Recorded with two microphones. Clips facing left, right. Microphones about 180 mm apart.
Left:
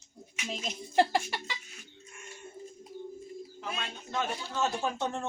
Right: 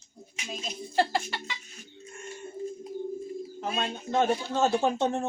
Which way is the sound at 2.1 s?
50° right (ahead or behind).